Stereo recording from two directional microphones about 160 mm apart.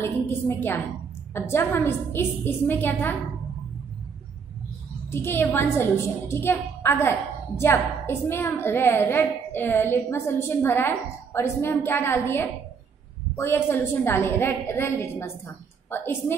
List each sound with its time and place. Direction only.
0.0 s a woman's voice: 15° left (ahead or behind)
5.1 s a woman's voice: 15° left (ahead or behind)